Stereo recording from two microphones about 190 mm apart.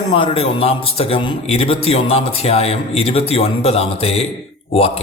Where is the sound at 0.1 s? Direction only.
30° left (ahead or behind).